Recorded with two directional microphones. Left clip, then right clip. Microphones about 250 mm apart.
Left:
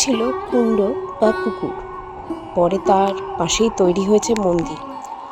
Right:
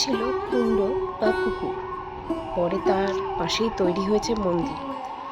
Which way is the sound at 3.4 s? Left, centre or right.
Left.